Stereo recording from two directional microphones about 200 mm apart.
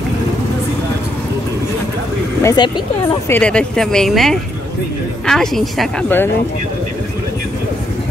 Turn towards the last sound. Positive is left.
turn(degrees=5)  # may be behind; listen again after turning